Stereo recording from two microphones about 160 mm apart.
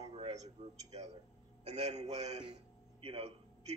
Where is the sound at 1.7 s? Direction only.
45° right (ahead or behind).